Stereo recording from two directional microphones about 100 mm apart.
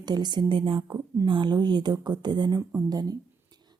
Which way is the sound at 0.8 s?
35° right (ahead or behind).